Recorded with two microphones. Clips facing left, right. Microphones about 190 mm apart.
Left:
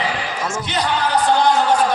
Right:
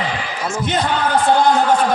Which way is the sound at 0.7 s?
50° right (ahead or behind).